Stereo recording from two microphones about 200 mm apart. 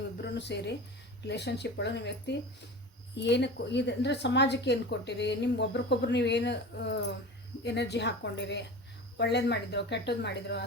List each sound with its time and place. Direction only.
0.2 s a woman's voice: 60° left (ahead or behind)